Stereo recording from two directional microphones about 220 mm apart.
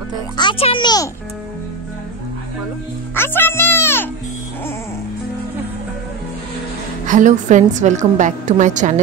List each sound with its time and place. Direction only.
0.4 s a child's voice: 25° left (ahead or behind)
3.2 s music: 10° left (ahead or behind)
7.1 s a woman's voice: 35° right (ahead or behind)